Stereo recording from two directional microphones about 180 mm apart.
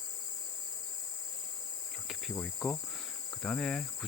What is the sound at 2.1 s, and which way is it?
Insect, centre (ahead or behind).